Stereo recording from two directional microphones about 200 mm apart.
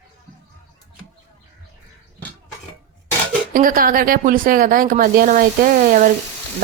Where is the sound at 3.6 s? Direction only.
45° right (ahead or behind).